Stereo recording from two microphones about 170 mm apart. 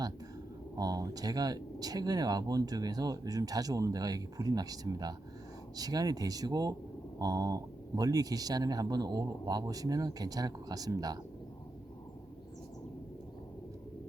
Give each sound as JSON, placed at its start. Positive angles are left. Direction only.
{"t": 0.8, "sound": "speech", "side_deg": -20}